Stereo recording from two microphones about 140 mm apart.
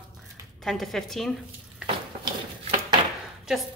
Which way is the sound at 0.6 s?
Centre (ahead or behind).